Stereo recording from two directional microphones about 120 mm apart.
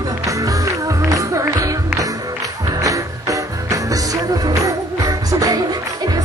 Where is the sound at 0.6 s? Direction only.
25° right (ahead or behind).